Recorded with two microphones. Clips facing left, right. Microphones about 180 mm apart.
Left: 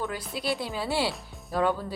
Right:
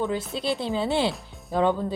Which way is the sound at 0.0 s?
25° right (ahead or behind).